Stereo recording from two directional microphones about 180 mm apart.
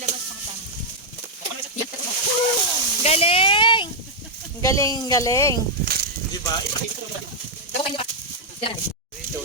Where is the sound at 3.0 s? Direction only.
35° left (ahead or behind).